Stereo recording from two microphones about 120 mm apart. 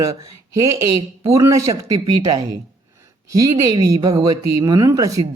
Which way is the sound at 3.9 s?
30° right (ahead or behind).